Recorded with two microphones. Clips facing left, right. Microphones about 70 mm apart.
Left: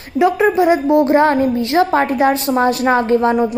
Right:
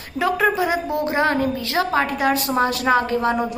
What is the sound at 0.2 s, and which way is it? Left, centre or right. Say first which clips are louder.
A woman's voice: left 6 dB; left.